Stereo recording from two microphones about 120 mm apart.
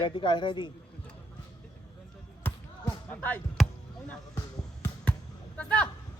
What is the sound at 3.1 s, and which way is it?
Speech, 15° left (ahead or behind).